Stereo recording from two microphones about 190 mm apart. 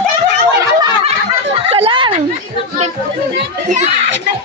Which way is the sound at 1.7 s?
30° right (ahead or behind).